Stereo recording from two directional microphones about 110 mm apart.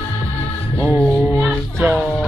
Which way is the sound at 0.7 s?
10° left (ahead or behind).